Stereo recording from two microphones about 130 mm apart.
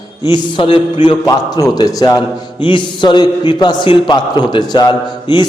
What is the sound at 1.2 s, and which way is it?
A man's voice, 30° left (ahead or behind).